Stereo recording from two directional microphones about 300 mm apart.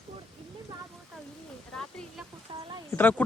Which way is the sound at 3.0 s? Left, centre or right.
Centre.